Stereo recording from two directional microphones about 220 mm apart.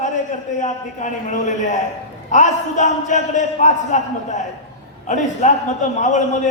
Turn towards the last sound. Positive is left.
turn(degrees=35)  # may be behind; listen again after turning